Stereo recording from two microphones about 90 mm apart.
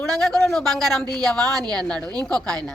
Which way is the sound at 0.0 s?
5° left (ahead or behind).